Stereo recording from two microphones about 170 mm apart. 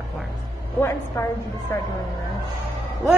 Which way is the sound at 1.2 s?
15° left (ahead or behind).